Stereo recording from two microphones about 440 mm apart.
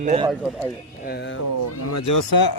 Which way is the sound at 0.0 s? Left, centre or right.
Centre.